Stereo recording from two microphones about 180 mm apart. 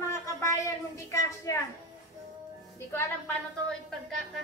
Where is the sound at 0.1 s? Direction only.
15° left (ahead or behind).